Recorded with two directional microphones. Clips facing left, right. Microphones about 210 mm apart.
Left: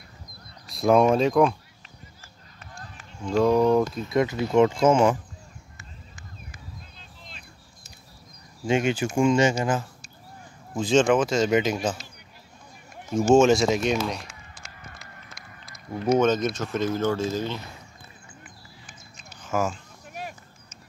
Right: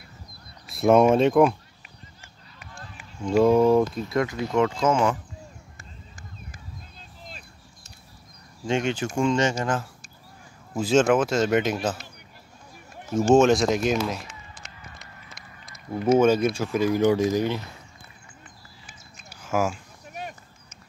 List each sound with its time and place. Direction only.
0.7 s speech: centre (ahead or behind)
3.3 s speech: 5° right (ahead or behind)
4.1 s speech: 20° left (ahead or behind)
8.6 s speech: 5° left (ahead or behind)
10.7 s speech: 5° right (ahead or behind)
13.1 s speech: centre (ahead or behind)
15.9 s speech: 10° right (ahead or behind)
19.4 s speech: 10° right (ahead or behind)